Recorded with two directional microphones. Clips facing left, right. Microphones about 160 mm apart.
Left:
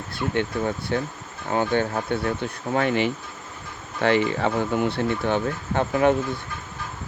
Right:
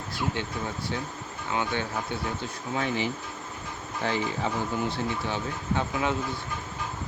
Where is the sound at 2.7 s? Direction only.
65° left (ahead or behind).